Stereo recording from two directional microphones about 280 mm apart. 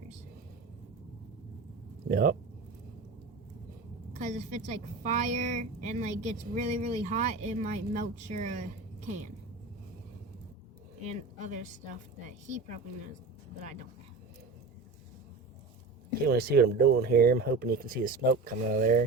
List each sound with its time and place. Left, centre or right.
2.0 s speech: right
4.1 s a woman's voice: right
11.1 s a woman's voice: right
16.2 s speech: right